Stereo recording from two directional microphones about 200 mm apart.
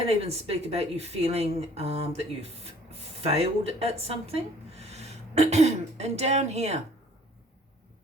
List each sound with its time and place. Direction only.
0.0 s a woman's voice: 30° right (ahead or behind)